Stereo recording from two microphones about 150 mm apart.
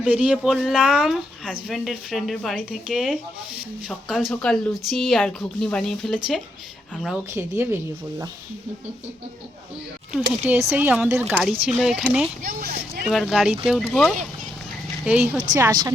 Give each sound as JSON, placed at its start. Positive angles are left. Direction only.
{"t": 0.1, "sound": "speech", "side_deg": -10}
{"t": 7.3, "sound": "speech", "side_deg": -15}
{"t": 10.1, "sound": "speech", "side_deg": -10}
{"t": 12.4, "sound": "speech", "side_deg": -60}
{"t": 13.1, "sound": "speech", "side_deg": 0}
{"t": 15.5, "sound": "speech", "side_deg": -25}